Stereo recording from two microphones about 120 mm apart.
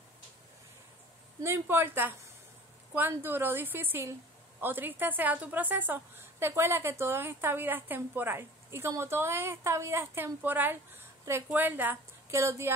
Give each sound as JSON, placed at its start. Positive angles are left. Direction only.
{"t": 1.4, "sound": "a woman's voice", "side_deg": -20}